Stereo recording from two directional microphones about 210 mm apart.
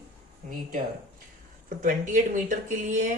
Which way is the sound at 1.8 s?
35° right (ahead or behind).